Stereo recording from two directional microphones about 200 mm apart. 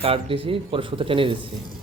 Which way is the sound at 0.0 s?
25° right (ahead or behind).